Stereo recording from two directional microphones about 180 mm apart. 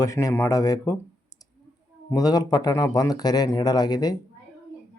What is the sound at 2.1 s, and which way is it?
Speech, 20° left (ahead or behind).